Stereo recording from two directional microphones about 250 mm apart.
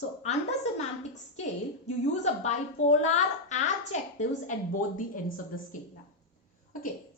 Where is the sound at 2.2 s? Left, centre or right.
Left.